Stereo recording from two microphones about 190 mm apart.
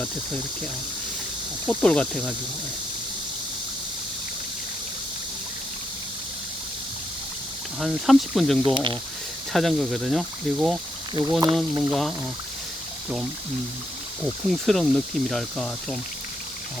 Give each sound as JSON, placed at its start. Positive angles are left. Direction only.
{"t": 1.6, "sound": "speech", "side_deg": 5}
{"t": 7.8, "sound": "speech", "side_deg": 0}
{"t": 8.6, "sound": "speech", "side_deg": -25}
{"t": 9.5, "sound": "speech", "side_deg": 0}
{"t": 11.1, "sound": "speech", "side_deg": -15}
{"t": 11.9, "sound": "speech", "side_deg": 0}
{"t": 14.5, "sound": "speech", "side_deg": 0}